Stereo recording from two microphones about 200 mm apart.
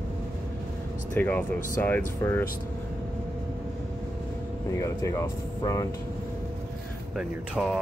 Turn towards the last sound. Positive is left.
turn(degrees=-5)  # may be behind; listen again after turning